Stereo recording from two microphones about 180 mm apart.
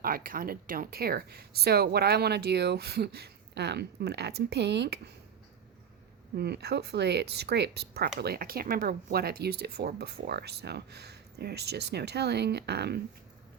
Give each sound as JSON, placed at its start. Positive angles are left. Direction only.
{"t": 0.0, "sound": "speech", "side_deg": -55}
{"t": 6.3, "sound": "speech", "side_deg": -65}